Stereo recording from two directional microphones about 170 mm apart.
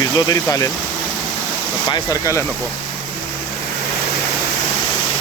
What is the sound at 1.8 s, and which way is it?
Speech, 20° left (ahead or behind).